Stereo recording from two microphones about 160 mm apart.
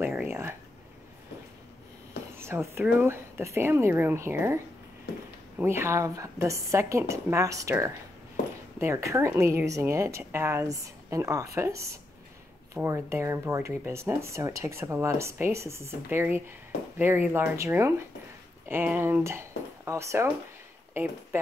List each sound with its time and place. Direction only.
0.0 s a sound: 10° right (ahead or behind)
2.3 s speech: 15° right (ahead or behind)
5.6 s speech: 15° right (ahead or behind)